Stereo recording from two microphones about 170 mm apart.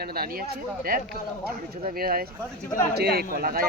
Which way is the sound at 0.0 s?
65° right (ahead or behind).